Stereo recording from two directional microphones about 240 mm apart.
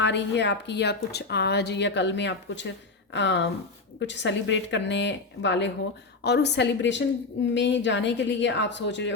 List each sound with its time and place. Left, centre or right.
0.0 s speech: left